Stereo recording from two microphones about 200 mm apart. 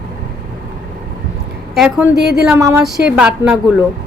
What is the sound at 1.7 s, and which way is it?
Speech, centre (ahead or behind).